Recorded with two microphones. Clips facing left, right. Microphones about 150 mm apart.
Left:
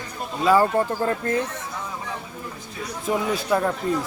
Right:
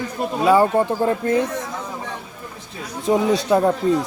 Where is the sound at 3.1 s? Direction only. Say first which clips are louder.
Right 6 dB; 25° right (ahead or behind).